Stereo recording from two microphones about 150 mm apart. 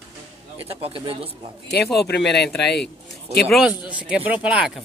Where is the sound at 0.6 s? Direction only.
40° right (ahead or behind).